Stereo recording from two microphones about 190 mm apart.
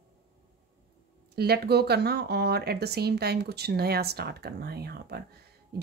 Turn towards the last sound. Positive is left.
turn(degrees=-55)  # may be behind; listen again after turning